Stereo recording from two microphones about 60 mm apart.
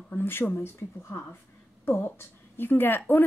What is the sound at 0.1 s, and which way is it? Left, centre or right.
A woman's voice, left.